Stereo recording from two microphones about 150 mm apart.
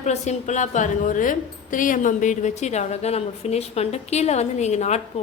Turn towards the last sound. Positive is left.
turn(degrees=50)  # may be behind; listen again after turning